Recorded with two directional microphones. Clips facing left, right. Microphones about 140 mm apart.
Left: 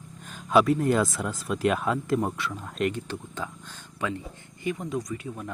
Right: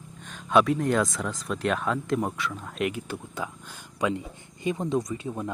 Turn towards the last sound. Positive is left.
turn(degrees=-25)  # may be behind; listen again after turning